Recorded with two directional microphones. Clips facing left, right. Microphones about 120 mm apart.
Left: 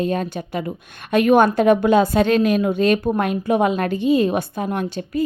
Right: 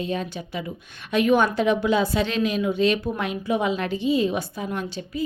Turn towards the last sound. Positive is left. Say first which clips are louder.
# left 6 dB
turn(degrees=55)  # may be behind; listen again after turning